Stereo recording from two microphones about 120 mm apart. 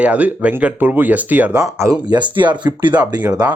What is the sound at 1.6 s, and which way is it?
Speech, 25° right (ahead or behind).